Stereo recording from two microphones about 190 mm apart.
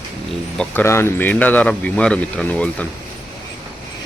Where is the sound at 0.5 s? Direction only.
5° left (ahead or behind).